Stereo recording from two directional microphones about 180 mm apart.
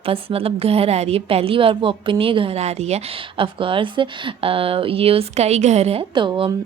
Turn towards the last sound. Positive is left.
turn(degrees=-25)  # may be behind; listen again after turning